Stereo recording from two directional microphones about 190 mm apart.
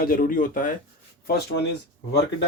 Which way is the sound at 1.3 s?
60° left (ahead or behind).